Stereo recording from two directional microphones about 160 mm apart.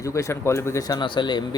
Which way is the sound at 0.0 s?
20° left (ahead or behind).